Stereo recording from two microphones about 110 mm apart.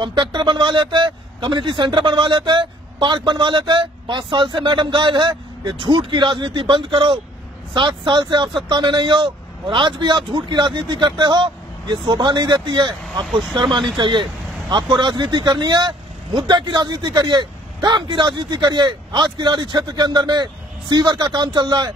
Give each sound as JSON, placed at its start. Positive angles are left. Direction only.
{"t": 0.0, "sound": "speech", "side_deg": -45}